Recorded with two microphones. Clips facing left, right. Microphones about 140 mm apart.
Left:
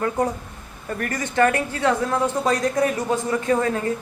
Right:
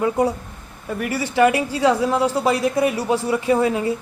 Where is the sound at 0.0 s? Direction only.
10° right (ahead or behind).